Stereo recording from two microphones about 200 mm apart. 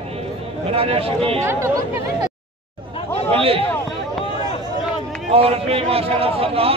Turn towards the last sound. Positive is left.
turn(degrees=-30)  # may be behind; listen again after turning